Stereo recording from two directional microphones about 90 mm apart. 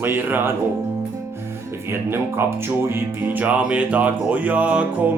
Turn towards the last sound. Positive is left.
turn(degrees=-15)  # may be behind; listen again after turning